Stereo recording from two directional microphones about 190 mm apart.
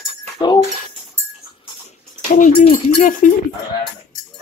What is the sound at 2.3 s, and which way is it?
Speech, 45° left (ahead or behind).